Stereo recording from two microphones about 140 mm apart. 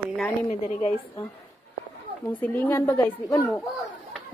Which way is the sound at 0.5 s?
50° left (ahead or behind).